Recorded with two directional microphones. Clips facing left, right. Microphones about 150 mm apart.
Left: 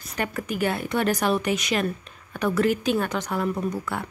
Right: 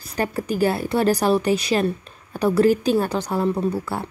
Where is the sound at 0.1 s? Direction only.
35° right (ahead or behind).